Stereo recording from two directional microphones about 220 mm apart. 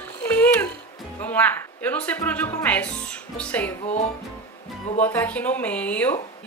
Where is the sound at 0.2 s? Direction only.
5° left (ahead or behind).